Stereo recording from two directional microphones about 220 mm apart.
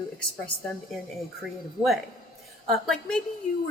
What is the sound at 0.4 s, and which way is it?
A woman's voice, 5° left (ahead or behind).